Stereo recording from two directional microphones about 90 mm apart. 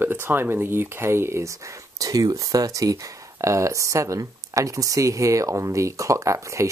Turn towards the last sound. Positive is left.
turn(degrees=-35)  # may be behind; listen again after turning